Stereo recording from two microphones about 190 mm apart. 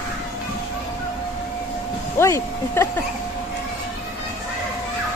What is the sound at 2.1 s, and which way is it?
Speech, 15° left (ahead or behind).